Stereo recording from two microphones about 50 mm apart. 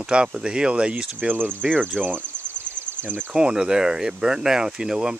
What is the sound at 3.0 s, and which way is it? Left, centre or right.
Speech, right.